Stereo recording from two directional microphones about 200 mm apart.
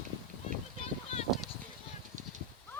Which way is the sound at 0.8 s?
30° left (ahead or behind).